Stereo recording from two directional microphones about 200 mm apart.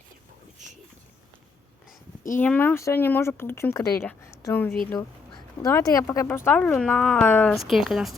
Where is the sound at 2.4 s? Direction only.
10° left (ahead or behind).